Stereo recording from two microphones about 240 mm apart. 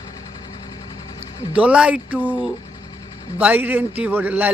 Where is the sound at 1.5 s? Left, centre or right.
Centre.